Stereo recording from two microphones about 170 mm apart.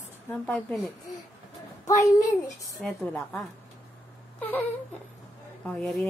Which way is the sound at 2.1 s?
20° left (ahead or behind).